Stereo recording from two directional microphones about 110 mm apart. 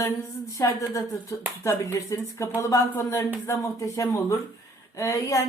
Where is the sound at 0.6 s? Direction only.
30° left (ahead or behind).